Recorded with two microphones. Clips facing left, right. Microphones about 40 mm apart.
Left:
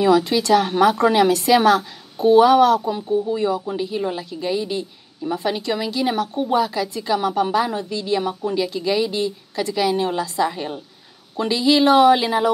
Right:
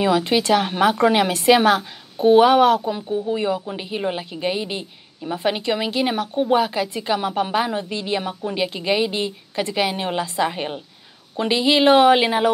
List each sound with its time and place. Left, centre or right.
0.0 s a woman's voice: right